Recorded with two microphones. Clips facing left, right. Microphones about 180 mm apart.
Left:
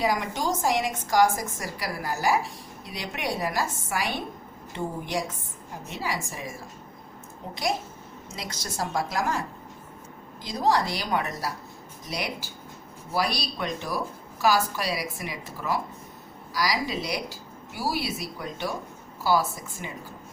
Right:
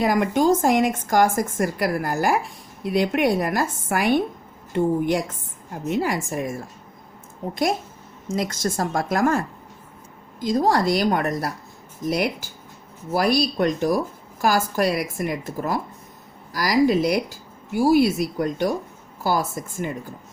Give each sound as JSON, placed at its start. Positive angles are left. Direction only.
{"t": 0.0, "sound": "a woman's voice", "side_deg": -55}
{"t": 10.4, "sound": "a woman's voice", "side_deg": -45}